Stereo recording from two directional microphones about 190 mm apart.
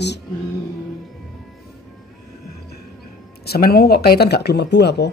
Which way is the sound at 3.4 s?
55° left (ahead or behind).